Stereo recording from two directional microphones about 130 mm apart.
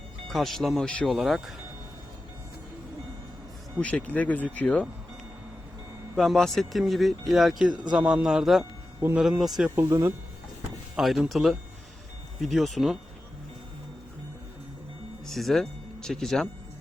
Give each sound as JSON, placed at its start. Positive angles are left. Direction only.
{"t": 0.3, "sound": "speech", "side_deg": 0}
{"t": 3.8, "sound": "speech", "side_deg": 10}
{"t": 6.1, "sound": "speech", "side_deg": 0}
{"t": 9.0, "sound": "speech", "side_deg": -20}
{"t": 9.4, "sound": "speech", "side_deg": -5}
{"t": 9.7, "sound": "speech", "side_deg": -20}
{"t": 10.9, "sound": "speech", "side_deg": 0}
{"t": 15.3, "sound": "speech", "side_deg": 0}